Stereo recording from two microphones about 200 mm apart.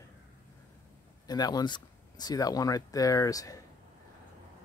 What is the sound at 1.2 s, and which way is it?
Speech, 20° left (ahead or behind).